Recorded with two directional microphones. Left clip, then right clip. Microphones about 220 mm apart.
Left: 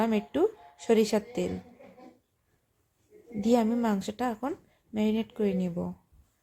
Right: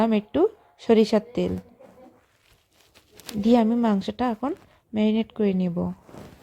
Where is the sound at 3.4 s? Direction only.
20° right (ahead or behind).